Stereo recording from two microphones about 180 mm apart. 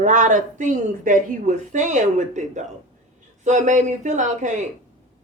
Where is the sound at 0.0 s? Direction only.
45° right (ahead or behind).